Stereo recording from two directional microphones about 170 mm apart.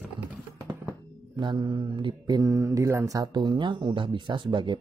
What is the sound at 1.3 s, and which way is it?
Speech, 25° right (ahead or behind).